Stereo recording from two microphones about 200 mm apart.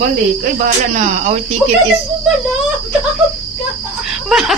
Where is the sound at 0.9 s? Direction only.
35° right (ahead or behind).